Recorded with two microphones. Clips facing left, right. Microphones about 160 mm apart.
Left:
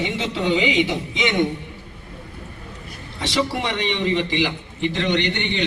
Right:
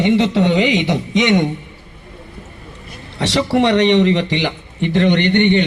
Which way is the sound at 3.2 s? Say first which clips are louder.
Right 8 dB; 75° right (ahead or behind).